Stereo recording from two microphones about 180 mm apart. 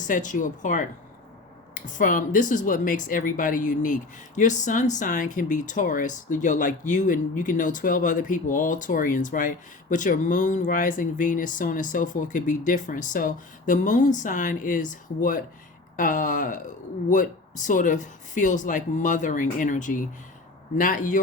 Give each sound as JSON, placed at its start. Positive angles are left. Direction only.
{"t": 0.1, "sound": "speech", "side_deg": 45}